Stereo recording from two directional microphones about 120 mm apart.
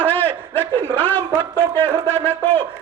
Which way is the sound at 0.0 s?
15° left (ahead or behind).